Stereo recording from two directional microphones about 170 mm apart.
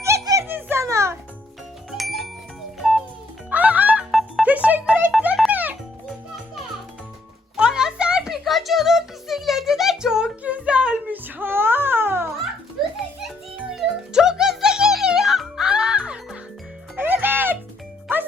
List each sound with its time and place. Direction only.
0.0 s giggle: 15° right (ahead or behind)
1.9 s music: centre (ahead or behind)
7.5 s a sound: 5° right (ahead or behind)
13.2 s music: centre (ahead or behind)